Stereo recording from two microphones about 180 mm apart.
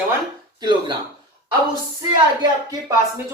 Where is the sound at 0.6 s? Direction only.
25° right (ahead or behind).